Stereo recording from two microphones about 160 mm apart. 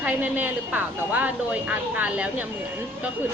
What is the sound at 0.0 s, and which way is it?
A woman's voice, 10° right (ahead or behind).